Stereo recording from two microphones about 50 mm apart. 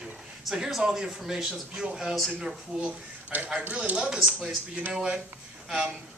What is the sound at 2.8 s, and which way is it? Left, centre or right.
Speech, right.